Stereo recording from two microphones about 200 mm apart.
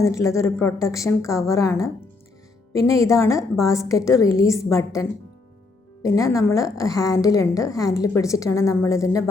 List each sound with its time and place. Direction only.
0.0 s a woman's voice: 15° left (ahead or behind)